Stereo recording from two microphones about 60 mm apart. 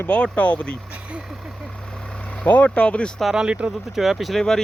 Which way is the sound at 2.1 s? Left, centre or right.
Centre.